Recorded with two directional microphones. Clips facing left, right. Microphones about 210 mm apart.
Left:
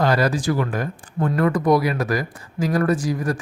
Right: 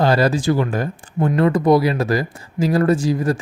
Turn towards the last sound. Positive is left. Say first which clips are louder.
# right 4 dB
turn(degrees=-25)  # may be behind; listen again after turning